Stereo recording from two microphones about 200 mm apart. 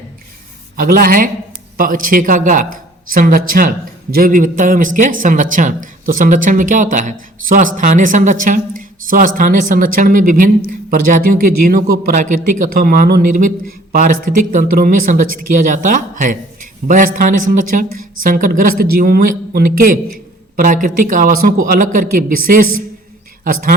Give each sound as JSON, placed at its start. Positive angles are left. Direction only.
{"t": 0.8, "sound": "a woman's voice", "side_deg": -45}